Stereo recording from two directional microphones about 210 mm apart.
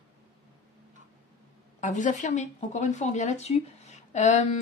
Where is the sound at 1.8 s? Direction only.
35° left (ahead or behind).